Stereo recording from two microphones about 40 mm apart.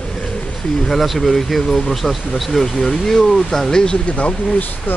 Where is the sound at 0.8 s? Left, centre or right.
Centre.